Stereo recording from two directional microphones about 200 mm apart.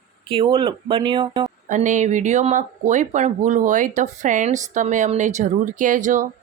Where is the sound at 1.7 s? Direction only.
40° right (ahead or behind).